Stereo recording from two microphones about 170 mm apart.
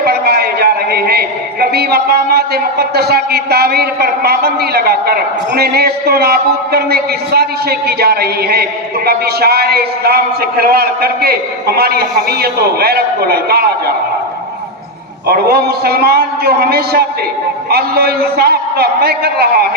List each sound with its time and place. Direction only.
0.0 s a man's voice: 65° right (ahead or behind)
15.3 s a man's voice: 65° right (ahead or behind)